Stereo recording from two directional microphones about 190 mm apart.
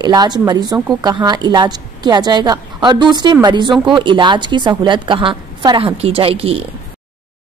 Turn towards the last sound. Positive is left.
turn(degrees=-30)  # may be behind; listen again after turning